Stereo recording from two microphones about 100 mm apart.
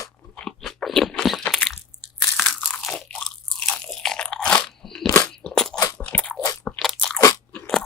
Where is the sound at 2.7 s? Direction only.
5° left (ahead or behind).